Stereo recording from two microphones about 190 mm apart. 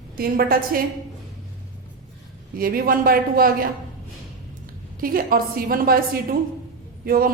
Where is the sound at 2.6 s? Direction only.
50° right (ahead or behind).